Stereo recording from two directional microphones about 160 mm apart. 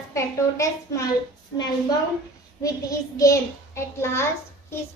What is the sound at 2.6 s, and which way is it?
A child's voice, 20° left (ahead or behind).